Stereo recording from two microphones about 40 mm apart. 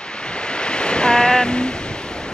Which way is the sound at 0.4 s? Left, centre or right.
Left.